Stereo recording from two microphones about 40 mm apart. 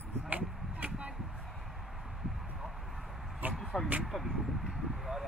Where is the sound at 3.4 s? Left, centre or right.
Right.